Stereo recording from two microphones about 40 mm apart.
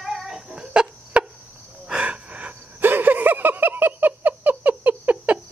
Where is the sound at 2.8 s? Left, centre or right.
Right.